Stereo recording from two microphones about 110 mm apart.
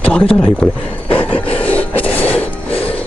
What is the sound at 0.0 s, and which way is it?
Speech, 10° left (ahead or behind).